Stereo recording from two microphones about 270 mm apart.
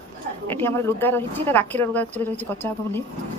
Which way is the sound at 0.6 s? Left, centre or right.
Centre.